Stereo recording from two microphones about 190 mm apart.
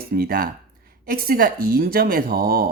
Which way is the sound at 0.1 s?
50° right (ahead or behind).